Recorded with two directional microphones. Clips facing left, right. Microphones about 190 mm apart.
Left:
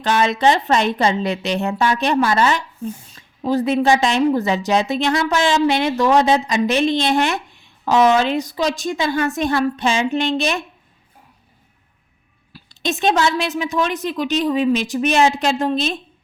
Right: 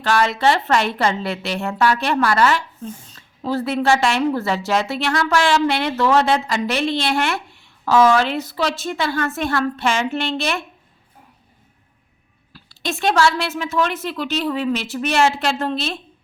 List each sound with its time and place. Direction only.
0.0 s speech: 20° left (ahead or behind)
12.5 s speech: 20° left (ahead or behind)